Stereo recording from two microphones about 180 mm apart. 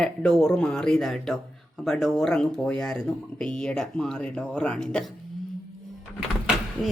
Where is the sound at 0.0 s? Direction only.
5° left (ahead or behind).